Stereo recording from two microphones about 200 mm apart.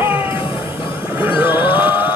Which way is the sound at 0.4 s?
25° left (ahead or behind).